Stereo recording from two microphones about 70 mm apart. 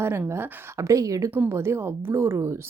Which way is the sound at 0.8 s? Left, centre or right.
Right.